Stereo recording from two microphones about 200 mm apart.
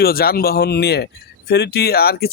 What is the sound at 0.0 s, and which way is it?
Speech, 50° left (ahead or behind).